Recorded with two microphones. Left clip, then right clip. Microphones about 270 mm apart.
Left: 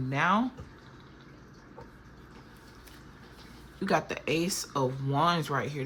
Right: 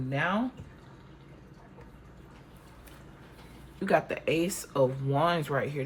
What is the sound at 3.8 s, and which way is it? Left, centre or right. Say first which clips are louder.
Speech: right 2 dB; centre.